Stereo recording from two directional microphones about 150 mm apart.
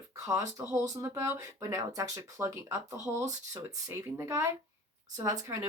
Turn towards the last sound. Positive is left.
turn(degrees=-20)  # may be behind; listen again after turning